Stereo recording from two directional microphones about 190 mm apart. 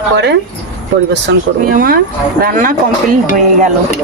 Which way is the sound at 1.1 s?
65° right (ahead or behind).